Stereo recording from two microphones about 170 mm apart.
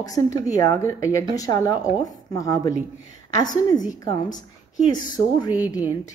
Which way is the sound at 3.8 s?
20° left (ahead or behind).